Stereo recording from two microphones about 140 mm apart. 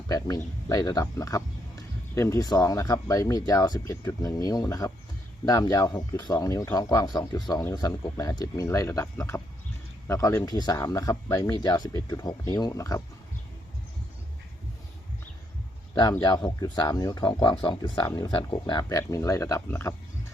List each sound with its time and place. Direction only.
0.1 s speech: 25° left (ahead or behind)
16.2 s speech: 30° left (ahead or behind)